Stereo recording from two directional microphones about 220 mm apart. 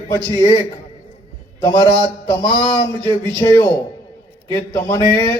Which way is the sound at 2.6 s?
5° left (ahead or behind).